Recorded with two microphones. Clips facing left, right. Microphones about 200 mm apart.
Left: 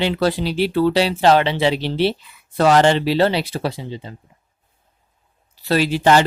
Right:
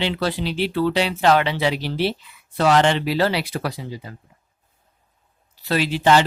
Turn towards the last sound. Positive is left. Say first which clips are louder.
# left 2 dB
turn(degrees=45)  # may be behind; listen again after turning